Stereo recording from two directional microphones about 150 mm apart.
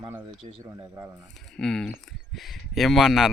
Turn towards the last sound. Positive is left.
turn(degrees=0)  # may be behind; listen again after turning